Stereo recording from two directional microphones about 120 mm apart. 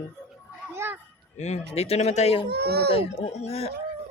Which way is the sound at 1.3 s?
70° left (ahead or behind).